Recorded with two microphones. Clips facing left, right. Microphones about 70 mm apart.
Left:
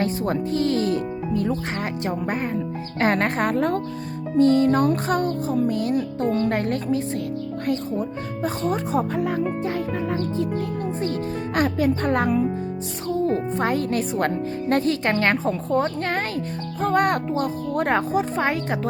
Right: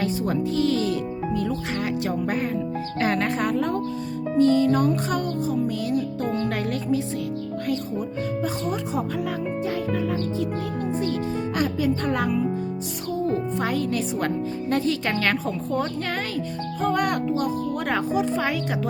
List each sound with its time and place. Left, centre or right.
0.0 s speech: left
3.0 s speech: left
11.5 s speech: left
13.6 s speech: left